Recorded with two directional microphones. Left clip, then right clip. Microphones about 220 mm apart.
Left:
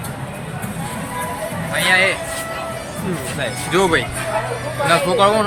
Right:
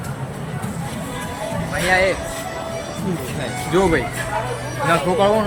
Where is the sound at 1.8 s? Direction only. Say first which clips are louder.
Left 2 dB; 20° right (ahead or behind).